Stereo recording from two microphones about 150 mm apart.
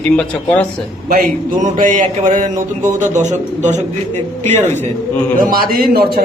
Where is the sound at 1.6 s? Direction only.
60° right (ahead or behind).